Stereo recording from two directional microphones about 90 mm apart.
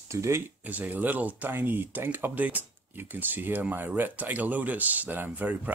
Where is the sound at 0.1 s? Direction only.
35° right (ahead or behind).